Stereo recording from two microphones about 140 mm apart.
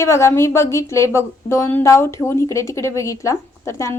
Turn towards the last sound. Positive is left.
turn(degrees=20)  # may be behind; listen again after turning